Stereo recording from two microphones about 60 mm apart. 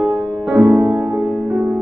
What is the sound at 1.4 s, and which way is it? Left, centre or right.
Music, right.